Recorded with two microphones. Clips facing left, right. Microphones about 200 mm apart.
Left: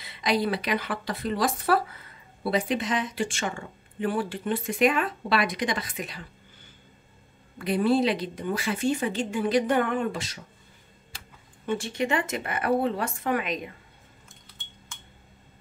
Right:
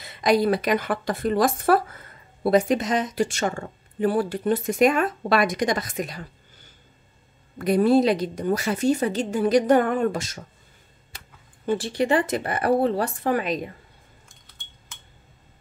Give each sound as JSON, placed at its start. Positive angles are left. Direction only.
{"t": 0.0, "sound": "a woman's voice", "side_deg": -45}
{"t": 7.5, "sound": "a woman's voice", "side_deg": -45}
{"t": 11.6, "sound": "a woman's voice", "side_deg": -35}